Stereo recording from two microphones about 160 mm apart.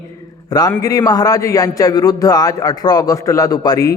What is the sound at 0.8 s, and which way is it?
A man's voice, 20° left (ahead or behind).